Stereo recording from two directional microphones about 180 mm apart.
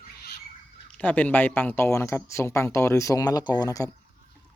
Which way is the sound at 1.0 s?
10° left (ahead or behind).